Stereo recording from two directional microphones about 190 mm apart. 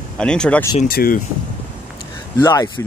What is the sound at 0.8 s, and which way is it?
Speech, 50° left (ahead or behind).